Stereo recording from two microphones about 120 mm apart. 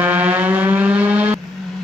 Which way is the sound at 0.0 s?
15° right (ahead or behind).